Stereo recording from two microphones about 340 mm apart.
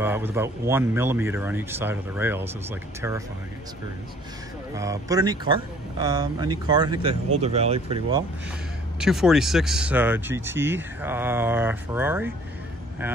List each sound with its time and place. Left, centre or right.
0.0 s speech: centre
4.7 s speech: centre
9.0 s speech: centre